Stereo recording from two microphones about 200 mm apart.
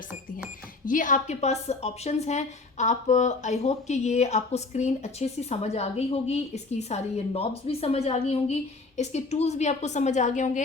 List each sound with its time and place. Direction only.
0.9 s a woman's voice: 40° left (ahead or behind)